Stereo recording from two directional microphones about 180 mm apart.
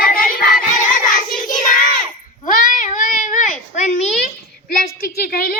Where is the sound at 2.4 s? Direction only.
50° left (ahead or behind).